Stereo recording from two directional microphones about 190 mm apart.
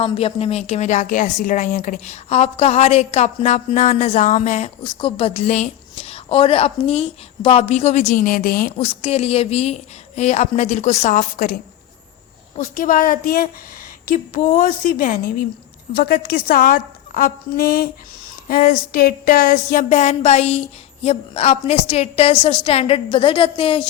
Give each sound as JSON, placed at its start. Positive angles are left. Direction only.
{"t": 0.0, "sound": "a woman's voice", "side_deg": 30}
{"t": 4.8, "sound": "a woman's voice", "side_deg": 25}
{"t": 8.7, "sound": "a woman's voice", "side_deg": 30}
{"t": 12.5, "sound": "a sound", "side_deg": 40}
{"t": 21.0, "sound": "a woman's voice", "side_deg": 35}